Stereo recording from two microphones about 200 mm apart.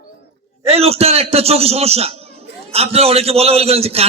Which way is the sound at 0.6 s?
30° right (ahead or behind).